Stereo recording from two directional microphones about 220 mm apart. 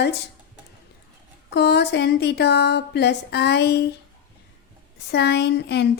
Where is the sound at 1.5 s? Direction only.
50° left (ahead or behind).